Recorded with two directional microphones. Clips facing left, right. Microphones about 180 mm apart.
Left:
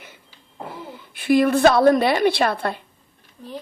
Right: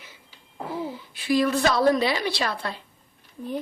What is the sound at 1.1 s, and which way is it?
A woman's voice, 55° left (ahead or behind).